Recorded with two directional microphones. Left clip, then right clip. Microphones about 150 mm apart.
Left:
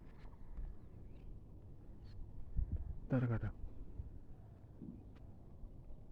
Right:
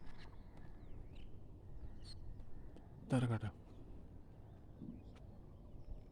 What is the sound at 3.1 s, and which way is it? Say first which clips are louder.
Speech: even; 20° right (ahead or behind).